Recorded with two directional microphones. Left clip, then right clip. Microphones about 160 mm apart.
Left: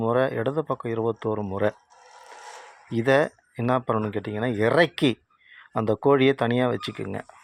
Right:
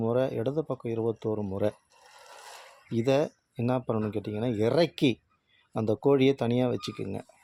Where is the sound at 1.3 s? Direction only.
40° left (ahead or behind).